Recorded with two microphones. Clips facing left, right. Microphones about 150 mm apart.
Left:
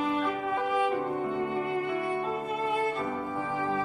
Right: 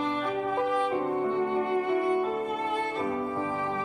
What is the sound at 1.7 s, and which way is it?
Music, 40° right (ahead or behind).